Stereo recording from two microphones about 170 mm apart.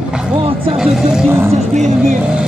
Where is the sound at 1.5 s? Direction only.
45° right (ahead or behind).